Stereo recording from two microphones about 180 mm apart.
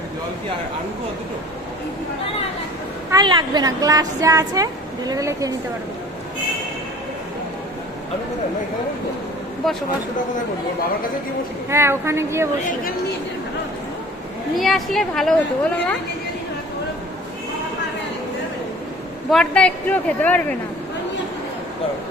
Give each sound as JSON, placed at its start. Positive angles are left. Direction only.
{"t": 3.1, "sound": "a woman's voice", "side_deg": -25}
{"t": 11.7, "sound": "a woman's voice", "side_deg": -15}
{"t": 14.6, "sound": "speech", "side_deg": 0}
{"t": 19.3, "sound": "a woman's voice", "side_deg": 5}